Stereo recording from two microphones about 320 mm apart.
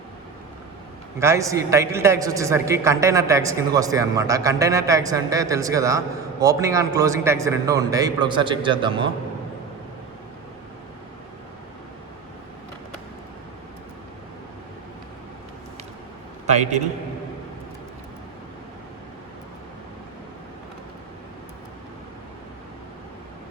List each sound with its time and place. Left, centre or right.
1.2 s a man's voice: centre
16.5 s a man's voice: right